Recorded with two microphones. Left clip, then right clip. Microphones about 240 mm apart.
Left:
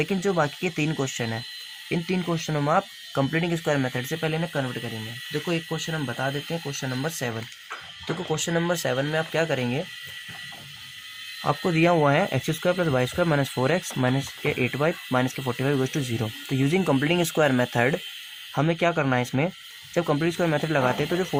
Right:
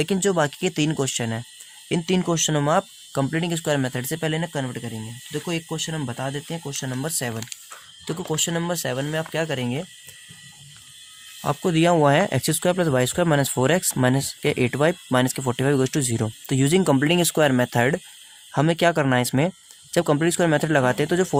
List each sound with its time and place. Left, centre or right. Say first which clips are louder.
0.0 s speech: right 3 dB; right
0.4 s speech: right 3 dB; right
1.9 s speech: right 4 dB; right
11.4 s speech: right 2 dB; right